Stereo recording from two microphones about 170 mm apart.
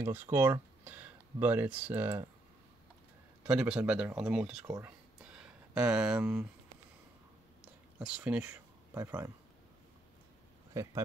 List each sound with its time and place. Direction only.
0.0 s speech: 10° right (ahead or behind)
3.4 s speech: 5° right (ahead or behind)
4.6 s speech: 20° right (ahead or behind)
5.2 s a sound: 5° right (ahead or behind)
8.0 s speech: 5° right (ahead or behind)
10.8 s speech: 15° right (ahead or behind)